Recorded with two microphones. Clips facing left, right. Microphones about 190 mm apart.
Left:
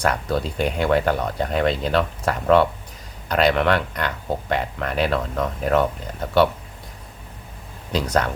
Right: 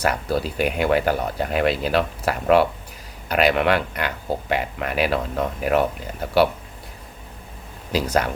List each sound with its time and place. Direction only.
0.0 s speech: 10° right (ahead or behind)
7.9 s speech: 10° right (ahead or behind)